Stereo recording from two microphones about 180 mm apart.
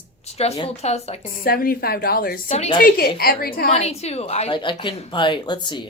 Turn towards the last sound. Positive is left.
turn(degrees=25)  # may be behind; listen again after turning